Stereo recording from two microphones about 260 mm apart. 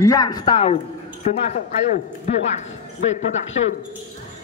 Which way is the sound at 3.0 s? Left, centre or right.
Left.